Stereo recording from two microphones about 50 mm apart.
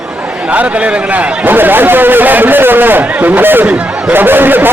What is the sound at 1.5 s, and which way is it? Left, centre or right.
Speech, right.